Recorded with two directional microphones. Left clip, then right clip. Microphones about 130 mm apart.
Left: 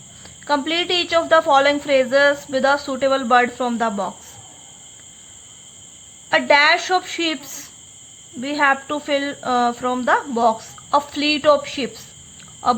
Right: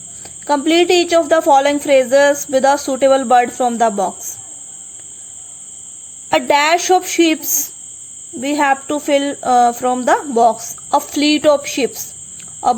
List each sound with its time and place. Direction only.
0.2 s a woman's voice: 40° right (ahead or behind)
6.3 s a woman's voice: 45° right (ahead or behind)